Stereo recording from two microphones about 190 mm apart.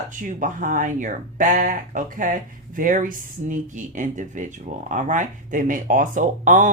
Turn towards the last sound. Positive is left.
turn(degrees=-45)  # may be behind; listen again after turning